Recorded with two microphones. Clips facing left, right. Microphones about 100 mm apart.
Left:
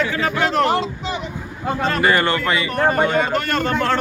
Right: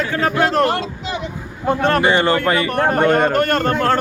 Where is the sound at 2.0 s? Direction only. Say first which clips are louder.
Right 2 dB; 25° right (ahead or behind).